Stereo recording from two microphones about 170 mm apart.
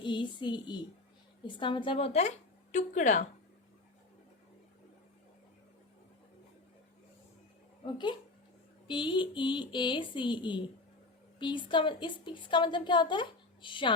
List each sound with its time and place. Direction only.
0.0 s a woman's voice: 30° left (ahead or behind); by 3.2 s 45° left (ahead or behind)
8.9 s a woman's voice: 30° left (ahead or behind)